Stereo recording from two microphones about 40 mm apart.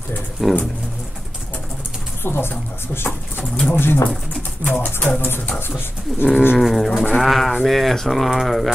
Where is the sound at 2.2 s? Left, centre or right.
Left.